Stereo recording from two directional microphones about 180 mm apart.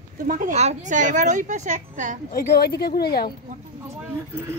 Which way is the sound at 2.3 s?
55° left (ahead or behind).